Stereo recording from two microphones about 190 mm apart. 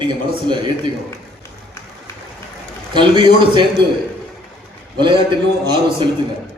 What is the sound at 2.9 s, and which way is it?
Speech, 25° right (ahead or behind).